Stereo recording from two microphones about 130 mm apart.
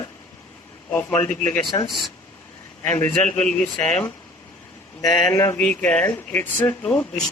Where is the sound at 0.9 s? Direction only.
10° left (ahead or behind).